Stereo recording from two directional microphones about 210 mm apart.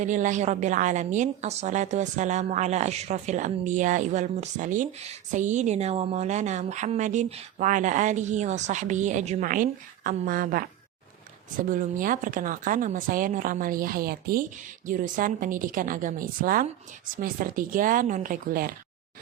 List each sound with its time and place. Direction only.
0.0 s a woman's voice: 35° right (ahead or behind)
11.7 s a woman's voice: 40° right (ahead or behind)